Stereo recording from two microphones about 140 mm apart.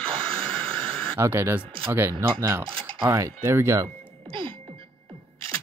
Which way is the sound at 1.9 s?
15° right (ahead or behind).